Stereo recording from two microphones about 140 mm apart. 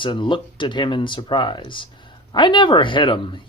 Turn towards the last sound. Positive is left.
turn(degrees=35)  # may be behind; listen again after turning